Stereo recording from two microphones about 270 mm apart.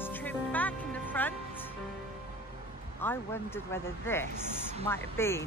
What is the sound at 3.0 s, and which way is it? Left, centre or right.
Speech, centre.